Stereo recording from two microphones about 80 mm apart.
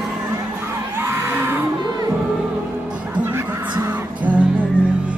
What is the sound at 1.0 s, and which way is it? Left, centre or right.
Music, right.